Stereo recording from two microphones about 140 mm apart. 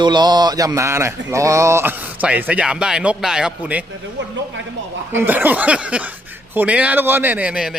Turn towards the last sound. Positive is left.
turn(degrees=-5)  # may be behind; listen again after turning